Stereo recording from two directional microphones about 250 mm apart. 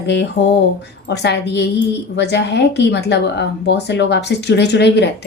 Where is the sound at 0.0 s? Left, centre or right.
Left.